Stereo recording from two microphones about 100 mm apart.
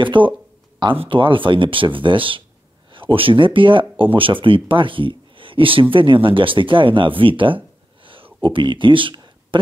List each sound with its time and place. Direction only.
0.0 s speech: 55° right (ahead or behind)